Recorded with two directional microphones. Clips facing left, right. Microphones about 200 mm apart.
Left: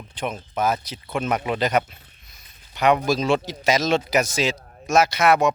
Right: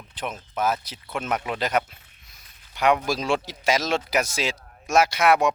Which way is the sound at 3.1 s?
10° right (ahead or behind).